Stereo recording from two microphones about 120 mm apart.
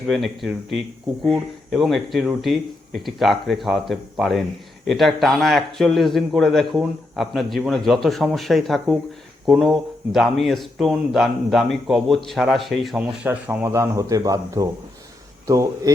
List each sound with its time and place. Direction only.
0.1 s speech: centre (ahead or behind)
13.0 s speech: 15° right (ahead or behind)